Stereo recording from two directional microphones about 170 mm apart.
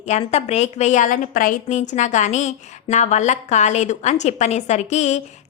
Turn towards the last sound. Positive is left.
turn(degrees=40)  # may be behind; listen again after turning